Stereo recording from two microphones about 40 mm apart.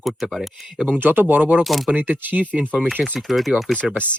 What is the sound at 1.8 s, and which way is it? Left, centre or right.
Speech, right.